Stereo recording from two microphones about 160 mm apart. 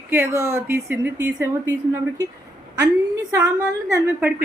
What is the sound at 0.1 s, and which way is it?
A woman's voice, 15° right (ahead or behind).